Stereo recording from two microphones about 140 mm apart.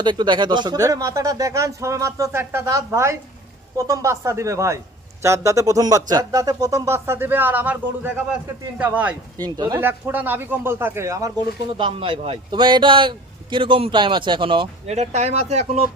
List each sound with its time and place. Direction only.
0.0 s speech: 35° right (ahead or behind); by 9.1 s 10° right (ahead or behind)
9.6 s speech: 25° right (ahead or behind)
9.8 s speech: 15° right (ahead or behind)
11.9 s speech: 40° right (ahead or behind)
14.8 s speech: 50° right (ahead or behind)